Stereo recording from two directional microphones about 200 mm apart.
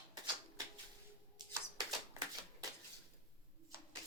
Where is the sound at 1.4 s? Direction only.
20° right (ahead or behind).